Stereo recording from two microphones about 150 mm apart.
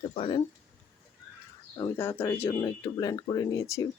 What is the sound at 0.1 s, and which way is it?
Speech, 40° left (ahead or behind).